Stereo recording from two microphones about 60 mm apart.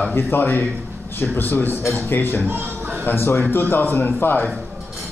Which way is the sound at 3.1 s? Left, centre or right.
Left.